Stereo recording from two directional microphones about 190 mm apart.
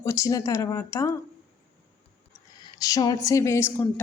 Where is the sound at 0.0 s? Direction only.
15° left (ahead or behind).